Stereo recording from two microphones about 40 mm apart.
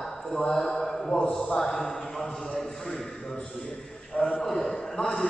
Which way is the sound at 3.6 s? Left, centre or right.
Left.